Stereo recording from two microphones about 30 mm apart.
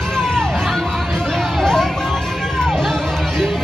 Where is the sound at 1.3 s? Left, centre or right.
Centre.